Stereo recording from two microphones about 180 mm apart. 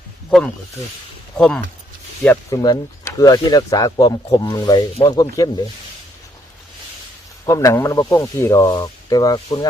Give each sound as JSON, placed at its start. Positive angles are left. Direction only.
{"t": 1.4, "sound": "speech", "side_deg": 5}
{"t": 2.6, "sound": "speech", "side_deg": 20}
{"t": 7.4, "sound": "speech", "side_deg": 20}